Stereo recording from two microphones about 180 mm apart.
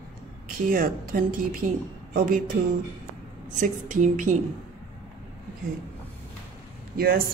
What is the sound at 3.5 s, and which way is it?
Speech, 45° right (ahead or behind).